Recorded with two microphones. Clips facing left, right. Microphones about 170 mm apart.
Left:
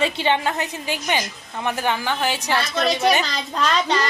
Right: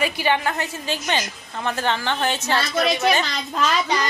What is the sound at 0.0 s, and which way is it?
A woman's voice, 25° left (ahead or behind).